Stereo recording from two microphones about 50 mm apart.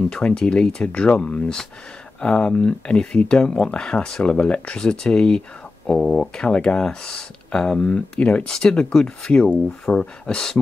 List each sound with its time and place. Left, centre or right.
0.1 s speech: centre
5.9 s speech: centre; by 8.5 s left
8.5 s speech: centre